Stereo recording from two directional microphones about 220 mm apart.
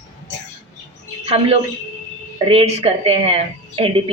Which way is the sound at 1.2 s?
30° right (ahead or behind).